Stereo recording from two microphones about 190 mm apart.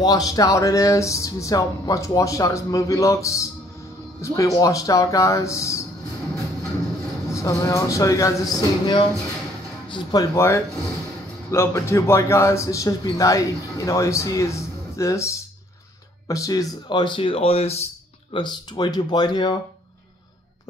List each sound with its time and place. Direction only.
0.0 s a man's voice: 20° left (ahead or behind)
7.3 s a man's voice: 15° left (ahead or behind); by 17.8 s 35° left (ahead or behind)
18.3 s speech: 25° left (ahead or behind)